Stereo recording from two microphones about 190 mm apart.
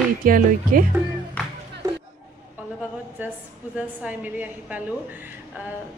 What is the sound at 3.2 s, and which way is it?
A woman's voice, 10° right (ahead or behind).